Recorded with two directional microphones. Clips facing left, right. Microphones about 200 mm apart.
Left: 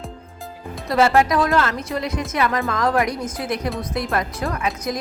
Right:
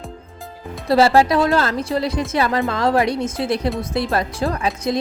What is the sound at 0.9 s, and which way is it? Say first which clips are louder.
A woman's voice: right 3 dB; 35° right (ahead or behind).